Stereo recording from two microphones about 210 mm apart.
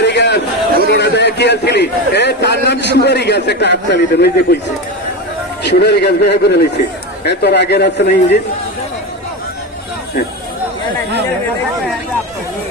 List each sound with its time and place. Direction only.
0.0 s a sound: 55° left (ahead or behind)
0.9 s a man's voice: 55° left (ahead or behind)
5.6 s a man's voice: 50° left (ahead or behind)